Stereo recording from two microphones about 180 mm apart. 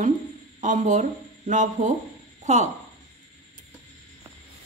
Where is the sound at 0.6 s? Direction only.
45° right (ahead or behind).